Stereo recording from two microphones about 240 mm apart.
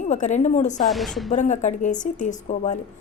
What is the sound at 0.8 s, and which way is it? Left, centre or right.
Speech, centre.